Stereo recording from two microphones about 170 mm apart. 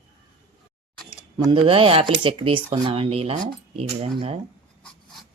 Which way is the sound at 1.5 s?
35° right (ahead or behind).